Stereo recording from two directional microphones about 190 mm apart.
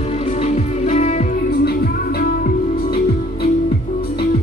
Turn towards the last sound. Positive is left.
turn(degrees=55)  # may be behind; listen again after turning